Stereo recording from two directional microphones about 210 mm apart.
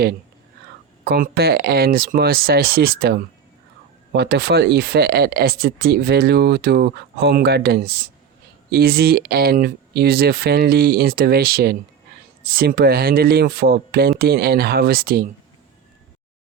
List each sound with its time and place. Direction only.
1.0 s speech: 50° right (ahead or behind)